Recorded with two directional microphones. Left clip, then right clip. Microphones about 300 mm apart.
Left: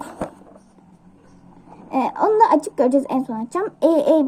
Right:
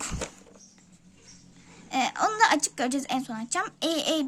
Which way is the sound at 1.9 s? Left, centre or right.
Right.